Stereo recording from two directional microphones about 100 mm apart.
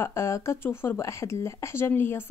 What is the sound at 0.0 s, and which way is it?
Speech, 30° left (ahead or behind).